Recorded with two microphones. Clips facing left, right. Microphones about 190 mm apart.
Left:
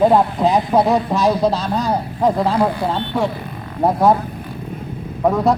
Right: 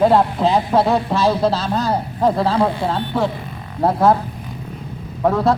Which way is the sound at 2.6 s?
Centre (ahead or behind).